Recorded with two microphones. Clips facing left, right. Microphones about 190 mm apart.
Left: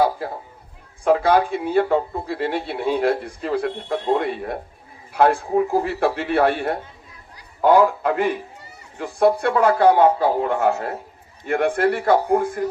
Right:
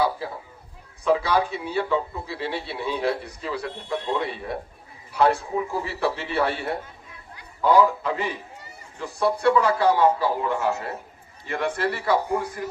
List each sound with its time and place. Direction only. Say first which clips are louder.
1.0 s speech: left 5 dB; 50° left (ahead or behind)